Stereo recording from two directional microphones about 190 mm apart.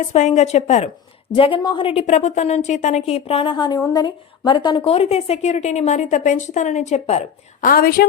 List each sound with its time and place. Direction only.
0.0 s a woman's voice: 40° left (ahead or behind)
7.7 s a woman's voice: 50° left (ahead or behind)